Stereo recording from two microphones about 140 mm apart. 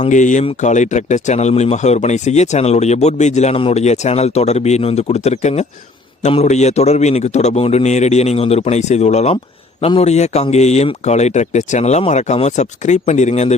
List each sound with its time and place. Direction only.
0.0 s speech: 60° left (ahead or behind)